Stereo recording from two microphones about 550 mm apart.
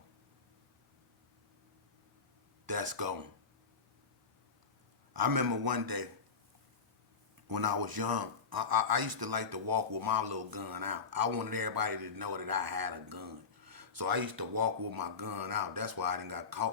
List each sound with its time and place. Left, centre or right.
2.6 s speech: right
5.1 s speech: right
7.4 s speech: right